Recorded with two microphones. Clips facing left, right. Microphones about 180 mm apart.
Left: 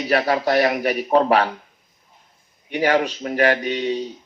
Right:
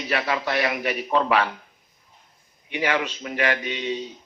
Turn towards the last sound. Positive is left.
turn(degrees=40)  # may be behind; listen again after turning